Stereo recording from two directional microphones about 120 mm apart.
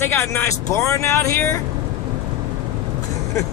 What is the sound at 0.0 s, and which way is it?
Speech, 15° left (ahead or behind).